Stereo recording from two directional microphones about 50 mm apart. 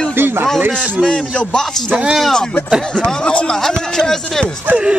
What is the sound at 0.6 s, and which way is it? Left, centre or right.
Speech, right.